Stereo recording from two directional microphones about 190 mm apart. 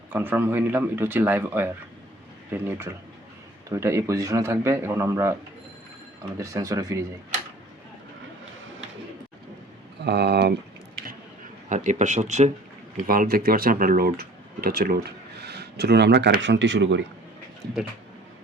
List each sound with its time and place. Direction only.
0.1 s speech: 10° right (ahead or behind)
10.0 s speech: 60° right (ahead or behind)
11.7 s speech: 40° right (ahead or behind)
13.1 s speech: 50° right (ahead or behind); by 17.0 s 70° right (ahead or behind)